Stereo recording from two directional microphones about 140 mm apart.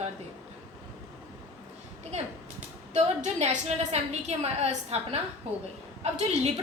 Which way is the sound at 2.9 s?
55° right (ahead or behind).